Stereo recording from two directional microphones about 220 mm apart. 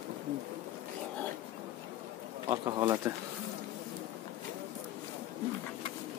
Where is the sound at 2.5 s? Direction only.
20° right (ahead or behind).